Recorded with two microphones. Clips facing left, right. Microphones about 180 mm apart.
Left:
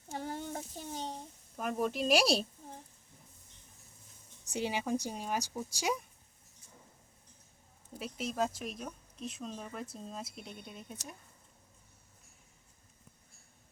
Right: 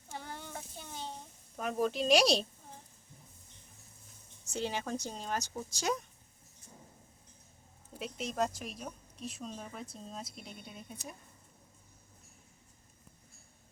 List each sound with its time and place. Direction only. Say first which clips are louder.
0.1 s a sound: left 5 dB; 40° left (ahead or behind)
1.5 s a woman's voice: right 1 dB; centre (ahead or behind)
4.5 s speech: left 2 dB; 10° left (ahead or behind)
7.9 s a woman's voice: even; 5° left (ahead or behind)